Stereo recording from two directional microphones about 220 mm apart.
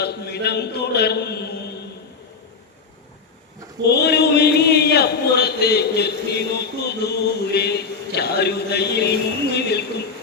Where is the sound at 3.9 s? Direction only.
50° left (ahead or behind).